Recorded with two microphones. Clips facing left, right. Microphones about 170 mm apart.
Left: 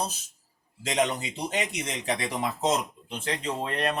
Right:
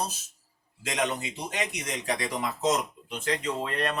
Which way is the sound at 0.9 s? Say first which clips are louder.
Left 3 dB; 25° left (ahead or behind).